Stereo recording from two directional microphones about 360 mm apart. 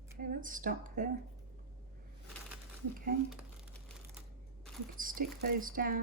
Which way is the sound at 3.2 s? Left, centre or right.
Centre.